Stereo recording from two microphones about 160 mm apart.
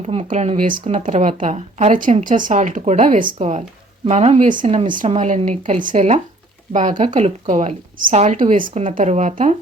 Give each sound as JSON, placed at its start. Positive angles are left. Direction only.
{"t": 0.0, "sound": "a woman's voice", "side_deg": -45}